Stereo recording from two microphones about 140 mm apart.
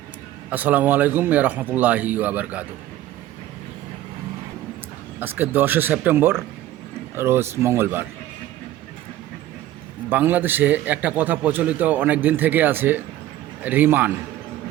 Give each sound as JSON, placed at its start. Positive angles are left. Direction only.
{"t": 0.5, "sound": "a man's voice", "side_deg": -10}
{"t": 5.2, "sound": "a man's voice", "side_deg": -15}
{"t": 10.1, "sound": "a man's voice", "side_deg": -15}